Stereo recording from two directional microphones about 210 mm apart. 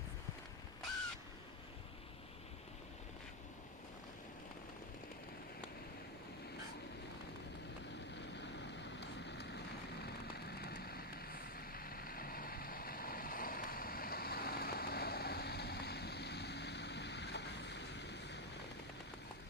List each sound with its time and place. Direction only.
8.1 s vehicle: 55° left (ahead or behind)